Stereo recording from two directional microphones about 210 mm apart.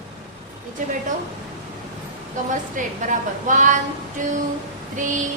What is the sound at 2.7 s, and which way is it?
A woman's voice, 35° right (ahead or behind).